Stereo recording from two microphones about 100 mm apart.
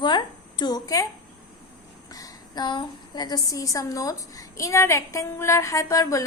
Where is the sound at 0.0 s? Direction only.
50° left (ahead or behind).